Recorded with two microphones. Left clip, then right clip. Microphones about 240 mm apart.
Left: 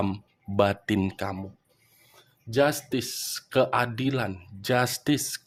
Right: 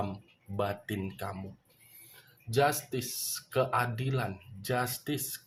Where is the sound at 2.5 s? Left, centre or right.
Left.